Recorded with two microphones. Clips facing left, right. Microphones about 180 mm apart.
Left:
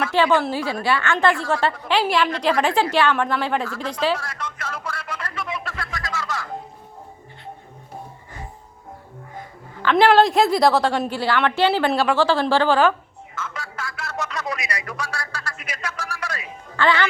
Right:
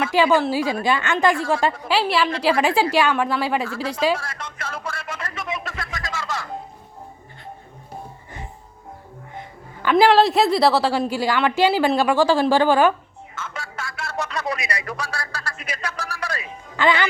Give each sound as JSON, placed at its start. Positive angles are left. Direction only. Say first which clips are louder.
{"t": 0.0, "sound": "a woman's voice", "louder": "right 1 dB", "side_deg": -10}
{"t": 2.0, "sound": "a woman's voice", "louder": "left 1 dB", "side_deg": 0}
{"t": 4.2, "sound": "a sound", "louder": "left 1 dB", "side_deg": -25}
{"t": 9.8, "sound": "a woman's voice", "louder": "even", "side_deg": -5}
{"t": 13.3, "sound": "a sound", "louder": "left 1 dB", "side_deg": -25}
{"t": 16.7, "sound": "speech", "louder": "even", "side_deg": -15}